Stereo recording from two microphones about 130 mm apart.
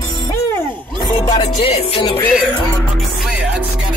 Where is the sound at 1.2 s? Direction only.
40° left (ahead or behind).